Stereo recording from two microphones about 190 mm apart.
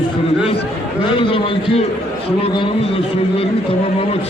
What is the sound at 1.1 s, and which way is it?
Speech, 25° left (ahead or behind).